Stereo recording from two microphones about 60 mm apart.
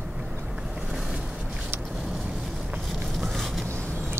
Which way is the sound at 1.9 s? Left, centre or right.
Centre.